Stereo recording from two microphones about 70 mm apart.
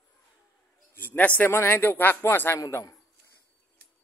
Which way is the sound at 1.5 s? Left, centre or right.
Left.